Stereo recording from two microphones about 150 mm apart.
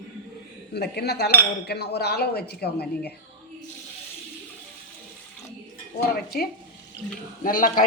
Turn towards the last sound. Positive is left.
turn(degrees=65)  # may be behind; listen again after turning